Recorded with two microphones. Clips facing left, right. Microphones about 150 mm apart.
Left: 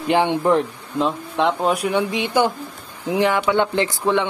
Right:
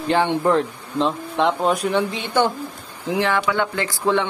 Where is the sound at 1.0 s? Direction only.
Centre (ahead or behind).